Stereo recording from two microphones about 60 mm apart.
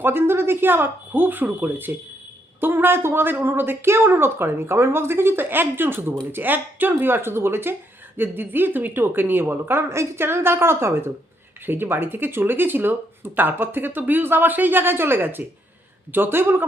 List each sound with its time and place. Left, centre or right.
0.0 s a woman's voice: right